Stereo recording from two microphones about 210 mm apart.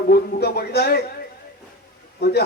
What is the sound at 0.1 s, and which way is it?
Speech, 50° left (ahead or behind).